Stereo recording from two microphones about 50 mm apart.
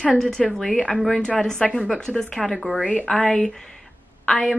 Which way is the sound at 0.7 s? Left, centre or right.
Left.